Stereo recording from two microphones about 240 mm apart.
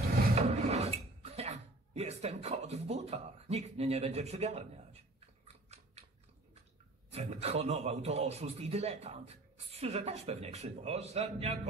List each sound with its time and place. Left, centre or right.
0.3 s filing: right
5.7 s scissors: right
7.1 s a man's voice: right